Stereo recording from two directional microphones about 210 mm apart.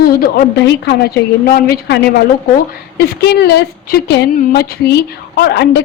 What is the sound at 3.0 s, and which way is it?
A woman's voice, 50° left (ahead or behind).